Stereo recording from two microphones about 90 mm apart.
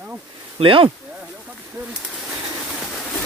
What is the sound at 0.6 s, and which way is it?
Speech, 75° right (ahead or behind).